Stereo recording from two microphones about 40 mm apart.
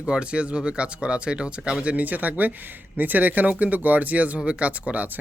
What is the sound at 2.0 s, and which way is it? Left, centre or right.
Speech, right.